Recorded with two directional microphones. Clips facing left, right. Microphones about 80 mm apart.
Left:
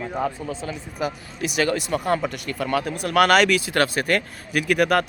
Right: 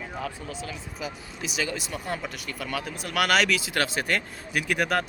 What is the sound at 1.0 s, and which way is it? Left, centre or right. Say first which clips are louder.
Speech: left 9 dB; left.